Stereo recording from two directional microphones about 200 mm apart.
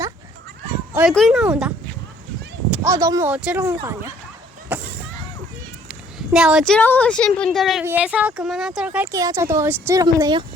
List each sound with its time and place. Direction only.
1.1 s speech: centre (ahead or behind)
2.8 s speech: 15° right (ahead or behind)
5.9 s a woman's voice: 5° right (ahead or behind)
9.1 s speech: 15° right (ahead or behind)